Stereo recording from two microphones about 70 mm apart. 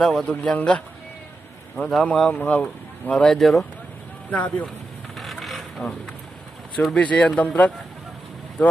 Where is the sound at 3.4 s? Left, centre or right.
Centre.